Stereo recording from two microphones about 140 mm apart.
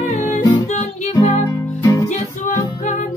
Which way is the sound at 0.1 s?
60° left (ahead or behind).